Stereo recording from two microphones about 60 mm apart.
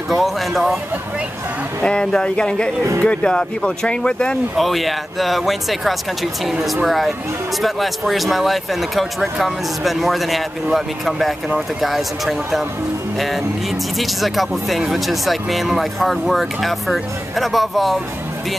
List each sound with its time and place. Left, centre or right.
0.1 s a sound: centre
1.8 s speech: centre
4.6 s speech: centre
8.1 s speech: centre
13.9 s speech: centre